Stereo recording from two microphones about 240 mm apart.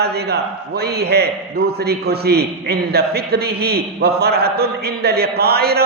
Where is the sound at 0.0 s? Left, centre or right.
Right.